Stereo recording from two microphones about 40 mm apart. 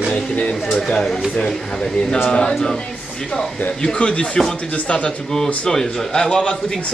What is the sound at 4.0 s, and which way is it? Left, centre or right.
Speech, left.